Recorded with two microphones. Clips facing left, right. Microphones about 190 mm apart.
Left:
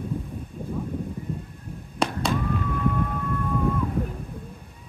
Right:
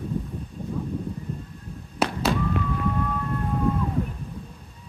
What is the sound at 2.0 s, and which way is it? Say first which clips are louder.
Fireworks: right 1 dB; 5° right (ahead or behind).